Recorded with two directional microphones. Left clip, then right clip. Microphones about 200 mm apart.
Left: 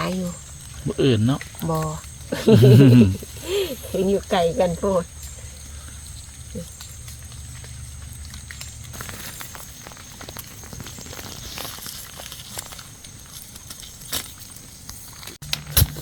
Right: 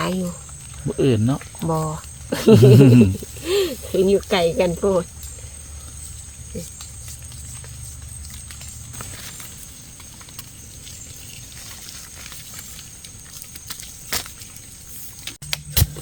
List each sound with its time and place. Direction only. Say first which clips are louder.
0.0 s speech: right 2 dB; 35° right (ahead or behind)
0.9 s speech: right 1 dB; 5° right (ahead or behind)
1.6 s speech: right 3 dB; 25° right (ahead or behind)
2.6 s speech: right 2 dB; 10° right (ahead or behind)
3.4 s speech: right 4 dB; 50° right (ahead or behind)